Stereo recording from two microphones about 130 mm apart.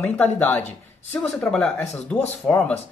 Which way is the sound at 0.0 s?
15° left (ahead or behind).